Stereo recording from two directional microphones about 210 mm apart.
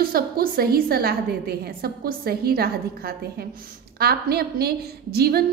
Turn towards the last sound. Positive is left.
turn(degrees=-45)  # may be behind; listen again after turning